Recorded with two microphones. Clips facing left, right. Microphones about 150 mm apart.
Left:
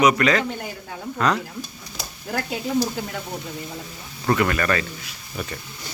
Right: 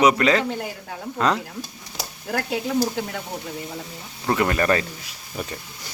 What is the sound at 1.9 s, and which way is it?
Speech, 15° right (ahead or behind).